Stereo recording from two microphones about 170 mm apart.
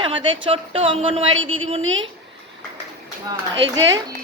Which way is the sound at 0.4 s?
35° right (ahead or behind).